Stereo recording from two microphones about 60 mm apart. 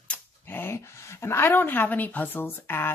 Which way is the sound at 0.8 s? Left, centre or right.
Left.